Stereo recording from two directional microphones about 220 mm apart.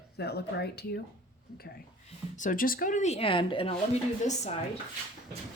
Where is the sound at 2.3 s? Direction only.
35° left (ahead or behind).